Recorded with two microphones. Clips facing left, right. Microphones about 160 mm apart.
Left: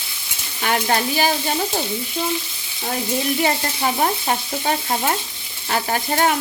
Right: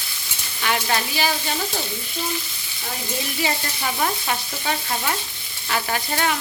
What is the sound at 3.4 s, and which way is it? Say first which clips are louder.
Frying: left 5 dB; 40° left (ahead or behind).